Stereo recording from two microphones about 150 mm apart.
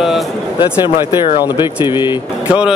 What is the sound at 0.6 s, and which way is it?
Speech, 30° left (ahead or behind).